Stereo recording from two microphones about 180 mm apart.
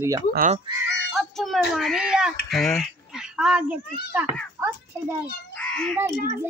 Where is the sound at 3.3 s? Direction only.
5° right (ahead or behind).